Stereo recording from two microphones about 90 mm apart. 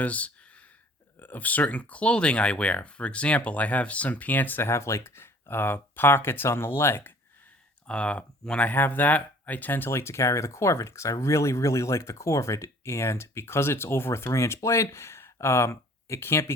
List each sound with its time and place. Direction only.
0.0 s speech: 15° left (ahead or behind)
7.9 s speech: 15° left (ahead or behind); by 16.5 s 30° left (ahead or behind)